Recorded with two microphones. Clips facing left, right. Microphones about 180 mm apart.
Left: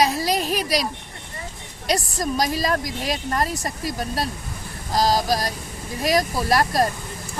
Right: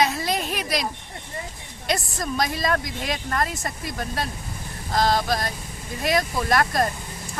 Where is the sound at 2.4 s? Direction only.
35° left (ahead or behind).